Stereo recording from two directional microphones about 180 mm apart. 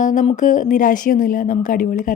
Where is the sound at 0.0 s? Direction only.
45° left (ahead or behind).